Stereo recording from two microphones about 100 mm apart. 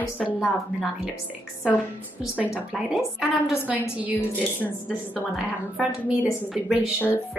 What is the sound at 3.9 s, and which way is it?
A woman's voice, 15° right (ahead or behind).